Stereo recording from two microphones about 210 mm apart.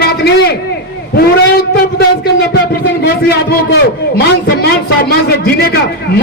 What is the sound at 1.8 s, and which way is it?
A man's voice, 50° left (ahead or behind).